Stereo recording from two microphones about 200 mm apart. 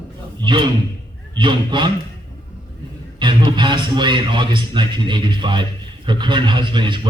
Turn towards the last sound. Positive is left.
turn(degrees=-25)  # may be behind; listen again after turning